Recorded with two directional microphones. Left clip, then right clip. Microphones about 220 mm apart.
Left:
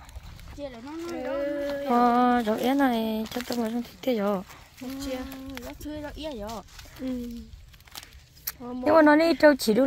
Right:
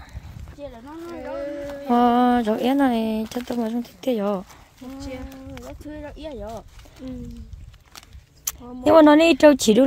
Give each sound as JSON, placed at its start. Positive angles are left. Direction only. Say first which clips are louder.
{"t": 0.6, "sound": "speech", "louder": "even", "side_deg": 40}
{"t": 1.9, "sound": "speech", "louder": "right 4 dB", "side_deg": -20}
{"t": 5.0, "sound": "speech", "louder": "left 2 dB", "side_deg": 15}
{"t": 5.7, "sound": "speech", "louder": "right 1 dB", "side_deg": 50}
{"t": 8.8, "sound": "speech", "louder": "right 6 dB", "side_deg": -35}